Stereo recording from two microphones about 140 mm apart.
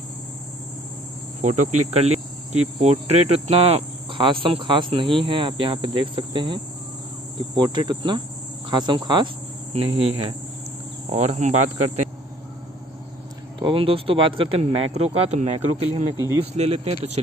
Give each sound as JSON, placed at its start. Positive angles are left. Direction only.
{"t": 1.4, "sound": "cricket", "side_deg": -60}
{"t": 9.7, "sound": "speech", "side_deg": -45}
{"t": 13.6, "sound": "cricket", "side_deg": -40}
{"t": 16.5, "sound": "speech", "side_deg": -45}